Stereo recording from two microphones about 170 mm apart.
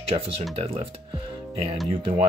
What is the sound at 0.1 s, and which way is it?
Speech, 35° right (ahead or behind).